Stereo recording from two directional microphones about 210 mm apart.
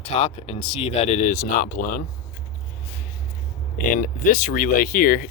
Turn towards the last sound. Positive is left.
turn(degrees=40)  # may be behind; listen again after turning